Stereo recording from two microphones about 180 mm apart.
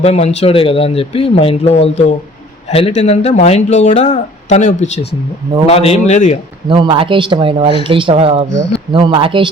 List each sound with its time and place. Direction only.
0.0 s speech: 35° left (ahead or behind)
6.7 s speech: 25° right (ahead or behind)